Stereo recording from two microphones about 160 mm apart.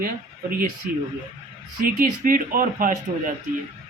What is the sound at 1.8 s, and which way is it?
Speech, 60° right (ahead or behind).